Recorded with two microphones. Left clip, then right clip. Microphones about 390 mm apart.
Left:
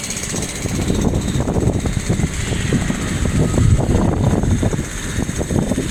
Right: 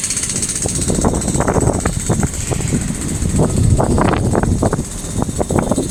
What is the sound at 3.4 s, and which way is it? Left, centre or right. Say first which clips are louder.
Vehicle: right 6 dB; right.